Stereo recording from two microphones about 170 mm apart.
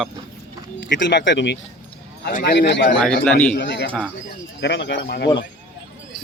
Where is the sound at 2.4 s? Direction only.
80° left.